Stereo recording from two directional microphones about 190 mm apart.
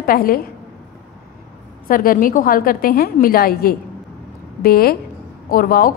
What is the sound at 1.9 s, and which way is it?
A woman's voice, 50° left (ahead or behind).